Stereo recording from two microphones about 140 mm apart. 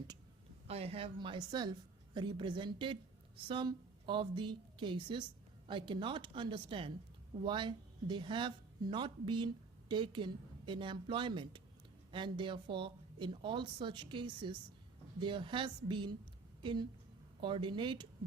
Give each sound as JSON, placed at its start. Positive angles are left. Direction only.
{"t": 0.7, "sound": "speech", "side_deg": -45}
{"t": 17.4, "sound": "speech", "side_deg": -35}